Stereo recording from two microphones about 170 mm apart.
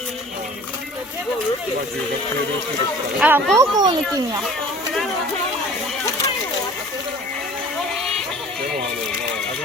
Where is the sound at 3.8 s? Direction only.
25° right (ahead or behind).